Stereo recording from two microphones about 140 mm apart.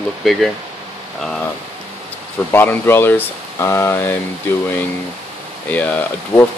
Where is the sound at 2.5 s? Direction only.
15° left (ahead or behind).